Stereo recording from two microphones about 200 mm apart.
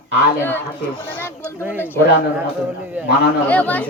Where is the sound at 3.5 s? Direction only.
5° left (ahead or behind).